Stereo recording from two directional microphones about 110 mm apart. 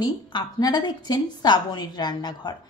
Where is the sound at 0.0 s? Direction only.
40° left (ahead or behind).